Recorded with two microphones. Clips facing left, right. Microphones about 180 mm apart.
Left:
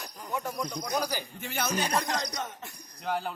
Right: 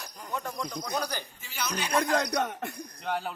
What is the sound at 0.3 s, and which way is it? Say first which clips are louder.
Cricket: left 1 dB; 5° left (ahead or behind).